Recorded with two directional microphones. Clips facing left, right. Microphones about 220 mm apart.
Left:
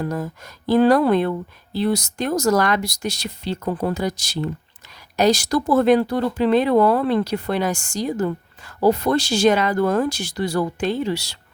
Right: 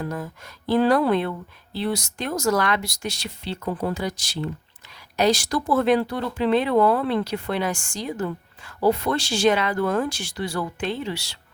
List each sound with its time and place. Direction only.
0.0 s speech: 40° left (ahead or behind)